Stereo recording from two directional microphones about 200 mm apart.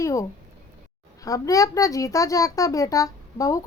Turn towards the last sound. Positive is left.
turn(degrees=15)  # may be behind; listen again after turning